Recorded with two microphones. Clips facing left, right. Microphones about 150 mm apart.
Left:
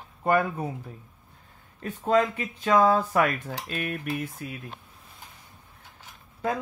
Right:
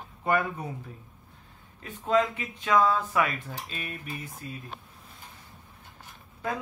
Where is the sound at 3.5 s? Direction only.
70° left (ahead or behind).